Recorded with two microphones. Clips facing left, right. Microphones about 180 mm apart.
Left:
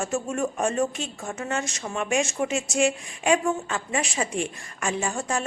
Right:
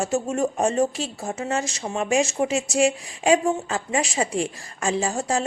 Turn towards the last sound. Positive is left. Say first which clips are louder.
# right 4 dB
turn(degrees=-35)  # may be behind; listen again after turning